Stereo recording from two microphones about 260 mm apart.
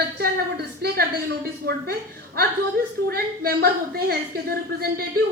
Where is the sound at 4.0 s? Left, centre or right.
Right.